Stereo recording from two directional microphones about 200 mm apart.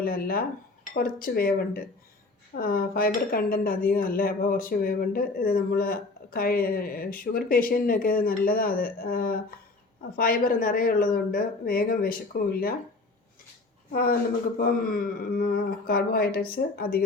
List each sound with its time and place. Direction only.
0.0 s speech: 45° left (ahead or behind)
13.9 s speech: 45° left (ahead or behind)